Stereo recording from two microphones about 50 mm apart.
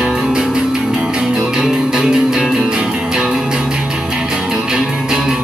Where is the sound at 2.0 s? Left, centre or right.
Centre.